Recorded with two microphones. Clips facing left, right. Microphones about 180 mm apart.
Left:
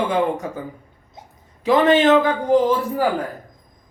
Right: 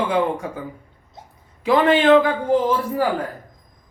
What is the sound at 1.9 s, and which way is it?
Speech, 40° left (ahead or behind).